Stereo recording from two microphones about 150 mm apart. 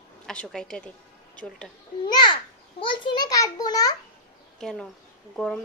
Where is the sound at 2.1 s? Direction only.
35° left (ahead or behind).